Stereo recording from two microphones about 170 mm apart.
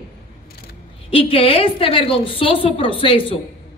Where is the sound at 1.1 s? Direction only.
35° left (ahead or behind).